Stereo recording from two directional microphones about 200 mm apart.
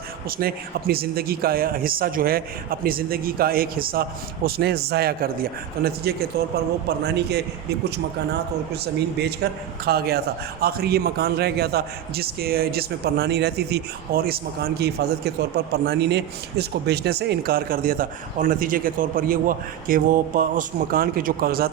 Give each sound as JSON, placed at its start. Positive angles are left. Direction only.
{"t": 0.3, "sound": "a man's voice", "side_deg": -50}